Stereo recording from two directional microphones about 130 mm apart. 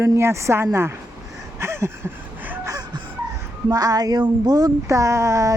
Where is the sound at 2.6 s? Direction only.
30° right (ahead or behind).